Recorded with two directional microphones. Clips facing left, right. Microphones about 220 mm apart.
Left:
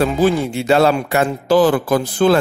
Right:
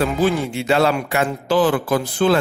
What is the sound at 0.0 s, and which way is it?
A man's voice, 40° left (ahead or behind).